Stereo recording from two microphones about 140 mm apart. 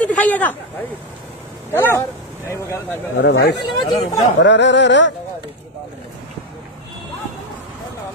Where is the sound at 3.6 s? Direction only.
35° left (ahead or behind).